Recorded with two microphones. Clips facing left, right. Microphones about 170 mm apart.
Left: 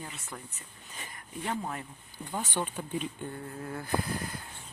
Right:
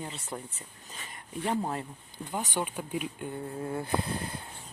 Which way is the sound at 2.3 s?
15° right (ahead or behind).